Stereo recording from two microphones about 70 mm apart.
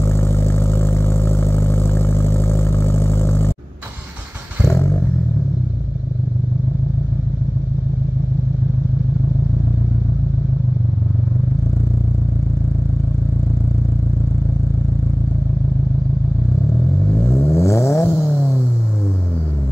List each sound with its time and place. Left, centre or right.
0.0 s vehicle: left
4.6 s a sound: left
17.2 s vehicle: left